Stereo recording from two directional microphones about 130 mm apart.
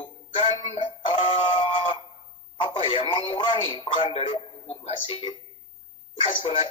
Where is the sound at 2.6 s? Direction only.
40° left (ahead or behind).